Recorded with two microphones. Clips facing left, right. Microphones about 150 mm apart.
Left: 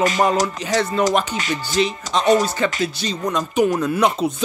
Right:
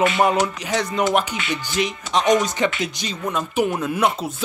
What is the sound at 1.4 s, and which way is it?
Speech, 40° left (ahead or behind).